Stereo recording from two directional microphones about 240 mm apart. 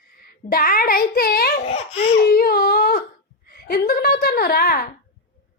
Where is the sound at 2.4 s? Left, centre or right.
Left.